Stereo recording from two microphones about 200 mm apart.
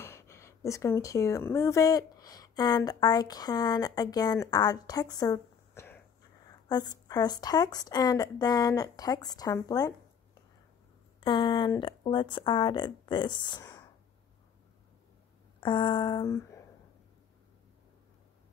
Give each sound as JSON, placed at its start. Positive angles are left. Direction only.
{"t": 0.0, "sound": "speech", "side_deg": 15}
{"t": 11.1, "sound": "speech", "side_deg": 25}
{"t": 15.6, "sound": "speech", "side_deg": 25}